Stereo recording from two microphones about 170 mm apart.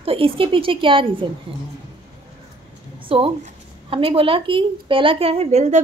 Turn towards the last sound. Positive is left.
turn(degrees=-40)  # may be behind; listen again after turning